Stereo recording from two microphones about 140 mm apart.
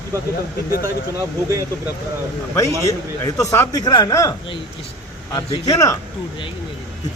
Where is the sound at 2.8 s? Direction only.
20° left (ahead or behind).